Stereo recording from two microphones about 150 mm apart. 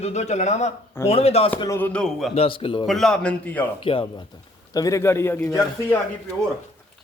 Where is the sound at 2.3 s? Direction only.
40° left (ahead or behind).